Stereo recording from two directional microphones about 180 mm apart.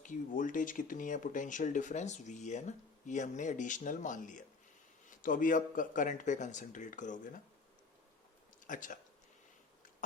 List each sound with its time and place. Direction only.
0.0 s speech: 45° left (ahead or behind)
8.6 s speech: 45° left (ahead or behind)